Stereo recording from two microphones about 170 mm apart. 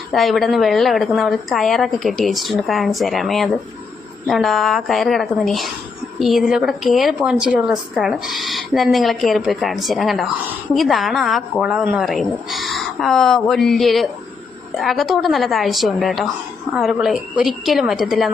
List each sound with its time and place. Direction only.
0.1 s a woman's voice: centre (ahead or behind)